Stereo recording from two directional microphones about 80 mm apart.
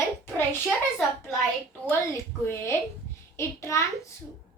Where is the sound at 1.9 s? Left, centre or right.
Left.